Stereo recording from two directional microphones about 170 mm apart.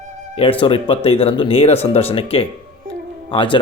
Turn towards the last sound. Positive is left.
turn(degrees=30)  # may be behind; listen again after turning